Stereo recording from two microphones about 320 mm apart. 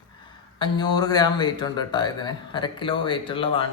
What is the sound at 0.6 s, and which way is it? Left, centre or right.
Speech, centre.